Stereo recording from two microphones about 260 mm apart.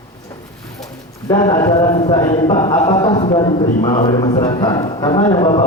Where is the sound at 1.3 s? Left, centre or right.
Centre.